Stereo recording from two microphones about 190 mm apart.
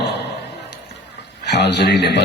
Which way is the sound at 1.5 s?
65° left (ahead or behind).